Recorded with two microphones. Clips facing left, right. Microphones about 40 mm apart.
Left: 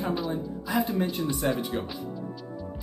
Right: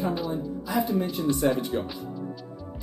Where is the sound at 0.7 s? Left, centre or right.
Left.